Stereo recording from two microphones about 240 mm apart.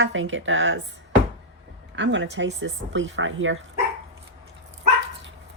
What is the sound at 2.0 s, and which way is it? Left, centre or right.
Speech, right.